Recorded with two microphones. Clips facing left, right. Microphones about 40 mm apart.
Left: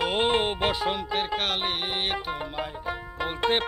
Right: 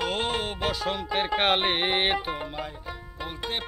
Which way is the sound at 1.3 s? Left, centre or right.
Right.